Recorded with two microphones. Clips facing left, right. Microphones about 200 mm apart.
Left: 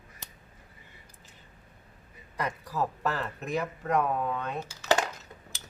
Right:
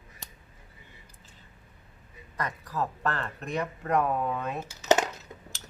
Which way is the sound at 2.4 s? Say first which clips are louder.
Left 1 dB; 10° left (ahead or behind).